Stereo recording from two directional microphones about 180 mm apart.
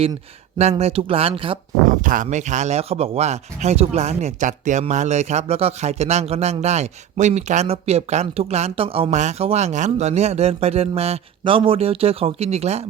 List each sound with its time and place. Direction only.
0.6 s speech: 35° right (ahead or behind)
2.0 s speech: 45° right (ahead or behind)